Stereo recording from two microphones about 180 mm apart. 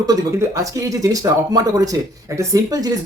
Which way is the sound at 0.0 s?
20° right (ahead or behind).